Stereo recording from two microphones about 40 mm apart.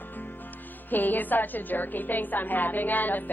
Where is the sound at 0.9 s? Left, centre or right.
Left.